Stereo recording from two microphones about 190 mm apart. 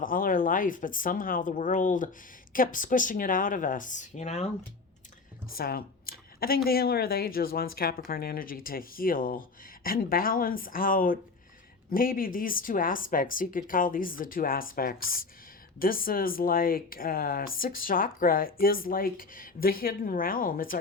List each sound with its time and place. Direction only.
0.0 s speech: 45° left (ahead or behind)
5.5 s speech: 50° left (ahead or behind)